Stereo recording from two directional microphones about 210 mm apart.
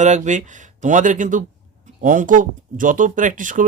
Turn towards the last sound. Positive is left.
turn(degrees=-40)  # may be behind; listen again after turning